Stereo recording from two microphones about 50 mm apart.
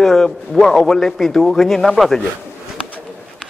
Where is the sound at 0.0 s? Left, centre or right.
Centre.